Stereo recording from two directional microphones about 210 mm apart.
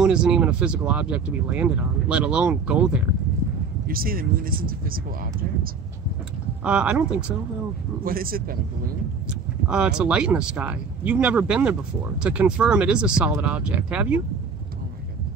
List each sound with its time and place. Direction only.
0.0 s speech: 5° right (ahead or behind)
3.8 s speech: 45° right (ahead or behind)
6.6 s speech: 5° right (ahead or behind)
8.0 s speech: 45° right (ahead or behind)
9.3 s speech: 5° right (ahead or behind)